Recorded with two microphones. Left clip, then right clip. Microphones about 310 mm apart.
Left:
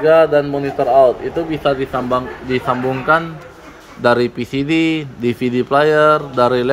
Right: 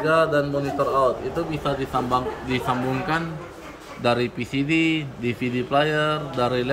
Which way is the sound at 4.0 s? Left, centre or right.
Centre.